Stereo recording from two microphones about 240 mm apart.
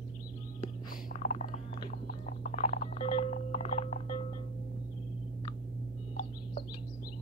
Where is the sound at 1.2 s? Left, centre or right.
Left.